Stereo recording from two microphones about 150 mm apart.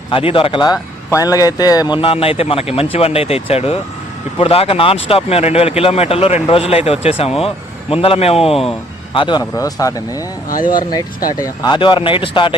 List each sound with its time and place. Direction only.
0.1 s speech: 35° left (ahead or behind)
2.0 s speech: 40° left (ahead or behind)
9.1 s speech: 30° left (ahead or behind)
10.5 s speech: 65° left (ahead or behind)
11.3 s speech: 25° left (ahead or behind)